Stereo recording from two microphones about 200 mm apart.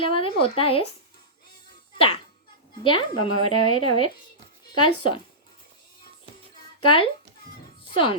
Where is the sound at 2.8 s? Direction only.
25° left (ahead or behind).